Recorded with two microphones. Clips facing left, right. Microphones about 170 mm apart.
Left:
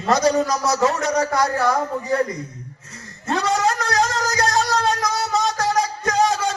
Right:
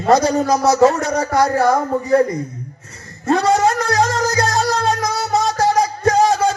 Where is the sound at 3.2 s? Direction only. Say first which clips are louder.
Right 6 dB; 35° right (ahead or behind).